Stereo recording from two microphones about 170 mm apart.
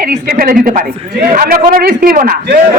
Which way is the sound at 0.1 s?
60° right (ahead or behind).